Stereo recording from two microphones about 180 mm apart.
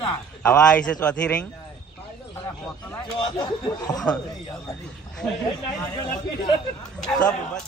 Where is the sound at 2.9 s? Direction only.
20° left (ahead or behind).